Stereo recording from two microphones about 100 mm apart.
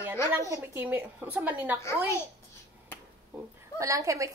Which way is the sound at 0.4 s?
30° right (ahead or behind).